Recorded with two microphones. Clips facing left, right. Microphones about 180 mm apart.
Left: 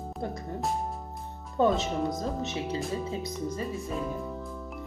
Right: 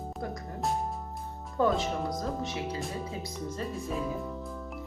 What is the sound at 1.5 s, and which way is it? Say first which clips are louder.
Speech: left 2 dB; 25° left (ahead or behind).